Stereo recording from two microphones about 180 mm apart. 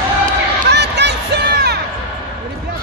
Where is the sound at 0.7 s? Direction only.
70° right (ahead or behind).